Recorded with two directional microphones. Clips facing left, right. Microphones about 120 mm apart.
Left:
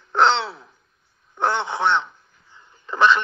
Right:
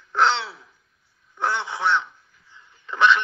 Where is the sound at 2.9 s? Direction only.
40° left (ahead or behind).